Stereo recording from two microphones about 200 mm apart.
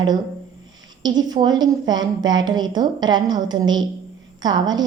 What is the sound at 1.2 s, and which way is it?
A woman's voice, 20° right (ahead or behind).